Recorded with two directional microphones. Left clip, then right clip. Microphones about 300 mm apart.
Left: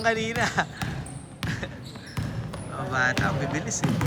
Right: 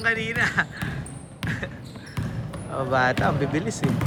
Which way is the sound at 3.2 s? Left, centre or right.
Centre.